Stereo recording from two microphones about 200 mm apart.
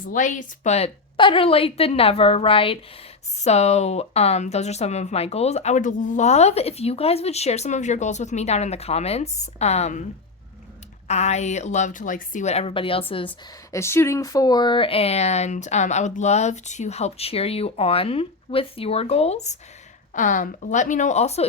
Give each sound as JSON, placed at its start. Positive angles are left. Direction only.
{"t": 0.1, "sound": "a woman's voice", "side_deg": 40}
{"t": 11.1, "sound": "speech", "side_deg": 35}
{"t": 13.7, "sound": "speech", "side_deg": 15}